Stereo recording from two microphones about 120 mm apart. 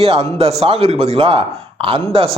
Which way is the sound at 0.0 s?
50° right (ahead or behind).